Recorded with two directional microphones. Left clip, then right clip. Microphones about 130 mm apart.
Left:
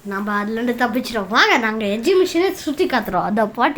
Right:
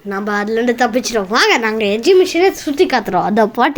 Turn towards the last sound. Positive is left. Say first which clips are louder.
# right 5 dB
turn(degrees=-45)  # may be behind; listen again after turning